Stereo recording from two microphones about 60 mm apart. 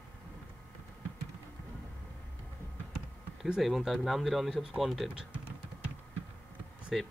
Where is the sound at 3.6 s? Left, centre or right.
Centre.